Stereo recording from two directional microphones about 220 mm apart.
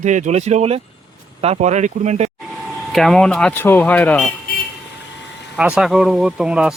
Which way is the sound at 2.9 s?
Centre (ahead or behind).